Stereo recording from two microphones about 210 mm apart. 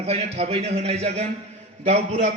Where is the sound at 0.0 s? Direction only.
30° right (ahead or behind).